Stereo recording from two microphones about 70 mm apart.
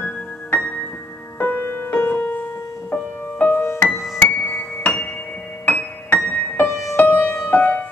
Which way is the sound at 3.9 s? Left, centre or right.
Centre.